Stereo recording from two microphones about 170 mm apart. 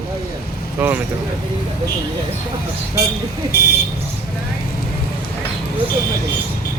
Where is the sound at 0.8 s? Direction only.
10° right (ahead or behind).